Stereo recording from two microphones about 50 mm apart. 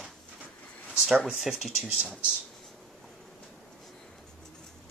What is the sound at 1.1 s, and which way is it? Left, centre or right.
Speech, right.